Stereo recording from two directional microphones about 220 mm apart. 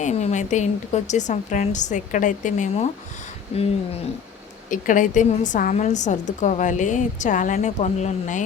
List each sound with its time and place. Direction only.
0.0 s a woman's voice: 30° left (ahead or behind)